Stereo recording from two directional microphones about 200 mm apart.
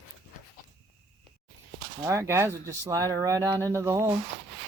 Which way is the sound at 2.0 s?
15° right (ahead or behind).